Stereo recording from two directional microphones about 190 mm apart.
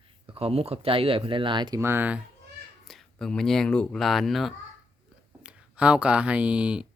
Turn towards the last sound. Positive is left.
turn(degrees=-5)  # may be behind; listen again after turning